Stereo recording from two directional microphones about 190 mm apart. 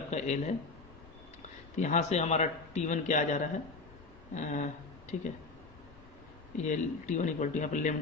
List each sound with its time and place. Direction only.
0.1 s a sound: 35° left (ahead or behind)
1.7 s a man's voice: 40° left (ahead or behind)
6.6 s a man's voice: 40° left (ahead or behind)